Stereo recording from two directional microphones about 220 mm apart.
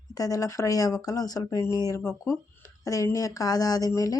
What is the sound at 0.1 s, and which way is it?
A woman's voice, 15° left (ahead or behind).